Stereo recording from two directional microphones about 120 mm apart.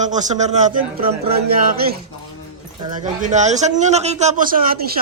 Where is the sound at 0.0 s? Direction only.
85° right.